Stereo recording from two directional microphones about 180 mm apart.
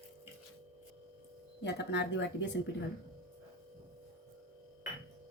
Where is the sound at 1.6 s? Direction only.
75° left (ahead or behind); by 2.5 s 90° left.